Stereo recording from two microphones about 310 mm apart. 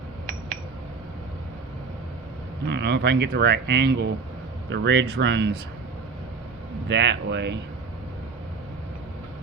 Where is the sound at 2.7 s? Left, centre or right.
Right.